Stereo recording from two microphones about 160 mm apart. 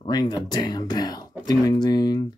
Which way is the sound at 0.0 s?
25° left (ahead or behind).